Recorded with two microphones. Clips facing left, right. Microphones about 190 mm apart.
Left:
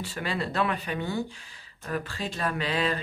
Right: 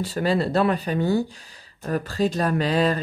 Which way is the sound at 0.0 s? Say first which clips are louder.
Right 9 dB; 40° right (ahead or behind).